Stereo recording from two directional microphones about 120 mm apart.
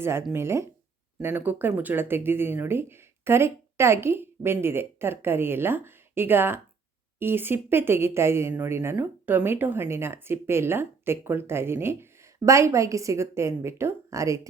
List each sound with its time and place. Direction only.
0.0 s speech: 20° right (ahead or behind)